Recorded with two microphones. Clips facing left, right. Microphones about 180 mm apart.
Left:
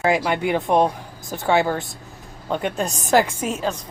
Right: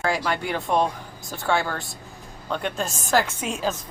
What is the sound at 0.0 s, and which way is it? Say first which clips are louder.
Speech: left 5 dB; 20° left (ahead or behind).